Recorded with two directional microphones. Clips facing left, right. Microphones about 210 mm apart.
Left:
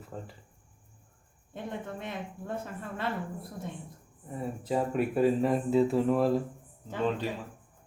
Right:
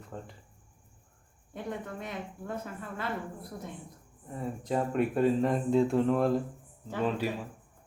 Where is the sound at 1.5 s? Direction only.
25° left (ahead or behind).